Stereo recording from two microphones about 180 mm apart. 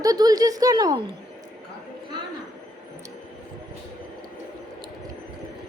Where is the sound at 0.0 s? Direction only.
20° right (ahead or behind).